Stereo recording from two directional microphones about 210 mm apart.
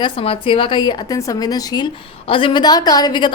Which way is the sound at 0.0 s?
25° left (ahead or behind).